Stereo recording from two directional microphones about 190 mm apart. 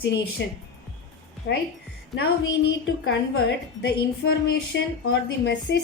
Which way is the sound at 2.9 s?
65° left (ahead or behind).